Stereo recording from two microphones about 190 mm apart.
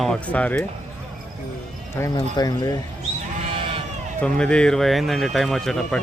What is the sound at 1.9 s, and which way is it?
Speech, 20° left (ahead or behind).